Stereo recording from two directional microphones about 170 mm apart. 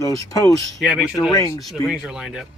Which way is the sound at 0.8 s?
5° right (ahead or behind).